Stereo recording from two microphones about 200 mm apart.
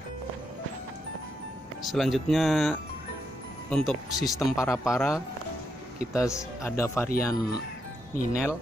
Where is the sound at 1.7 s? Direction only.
Centre (ahead or behind).